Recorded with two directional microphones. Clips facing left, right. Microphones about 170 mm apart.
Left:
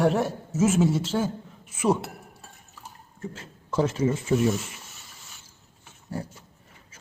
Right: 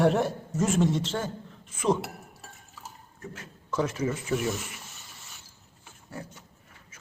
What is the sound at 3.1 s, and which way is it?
Speech, 30° left (ahead or behind).